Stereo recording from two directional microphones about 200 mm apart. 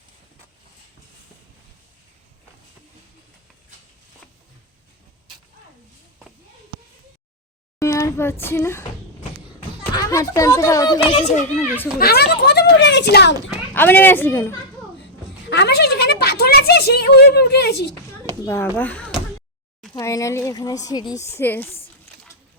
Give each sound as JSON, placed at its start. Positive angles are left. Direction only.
{"t": 7.8, "sound": "speech", "side_deg": 15}
{"t": 9.9, "sound": "speech", "side_deg": 15}
{"t": 11.1, "sound": "a child's voice", "side_deg": 35}
{"t": 11.9, "sound": "a child's voice", "side_deg": 50}
{"t": 13.7, "sound": "a woman's voice", "side_deg": 10}
{"t": 15.4, "sound": "a woman's voice", "side_deg": 60}
{"t": 18.4, "sound": "a woman's voice", "side_deg": 15}
{"t": 18.8, "sound": "a sound", "side_deg": 5}
{"t": 19.9, "sound": "speech", "side_deg": 15}